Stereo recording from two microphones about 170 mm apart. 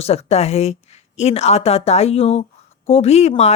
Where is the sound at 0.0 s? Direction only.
40° left (ahead or behind).